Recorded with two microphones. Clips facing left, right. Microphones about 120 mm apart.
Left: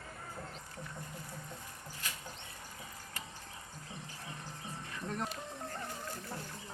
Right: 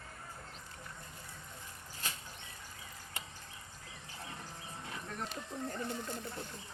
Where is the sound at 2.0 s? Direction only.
30° right (ahead or behind).